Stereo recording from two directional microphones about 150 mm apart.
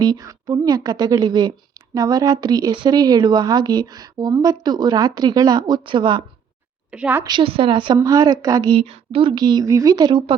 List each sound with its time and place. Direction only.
0.0 s a woman's voice: 25° right (ahead or behind)
6.9 s a woman's voice: 10° right (ahead or behind)
7.3 s a woman's voice: 35° right (ahead or behind)
8.8 s a woman's voice: 40° right (ahead or behind)